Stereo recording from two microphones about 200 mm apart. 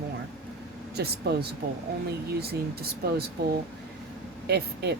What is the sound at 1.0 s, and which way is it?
Speech, 55° right (ahead or behind).